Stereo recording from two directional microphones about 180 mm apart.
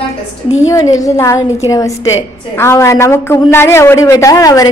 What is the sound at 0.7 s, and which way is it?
A man's voice, 20° left (ahead or behind).